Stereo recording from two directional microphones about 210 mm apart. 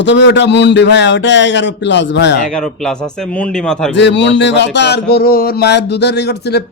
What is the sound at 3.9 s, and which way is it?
A man's voice, 55° left (ahead or behind).